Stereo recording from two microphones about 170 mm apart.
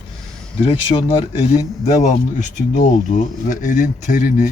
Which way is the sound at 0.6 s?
30° left (ahead or behind).